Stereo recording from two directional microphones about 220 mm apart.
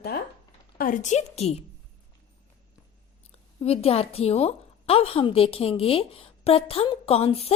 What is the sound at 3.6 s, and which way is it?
A woman's voice, 25° left (ahead or behind).